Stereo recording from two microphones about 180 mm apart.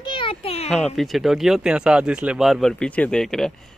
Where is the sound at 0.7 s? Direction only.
Centre (ahead or behind).